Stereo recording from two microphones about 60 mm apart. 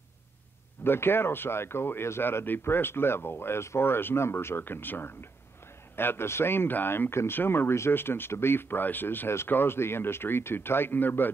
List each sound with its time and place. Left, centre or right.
0.8 s speech: left